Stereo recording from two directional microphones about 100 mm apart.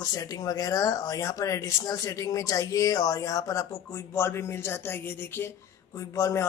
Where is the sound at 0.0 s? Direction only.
35° left (ahead or behind).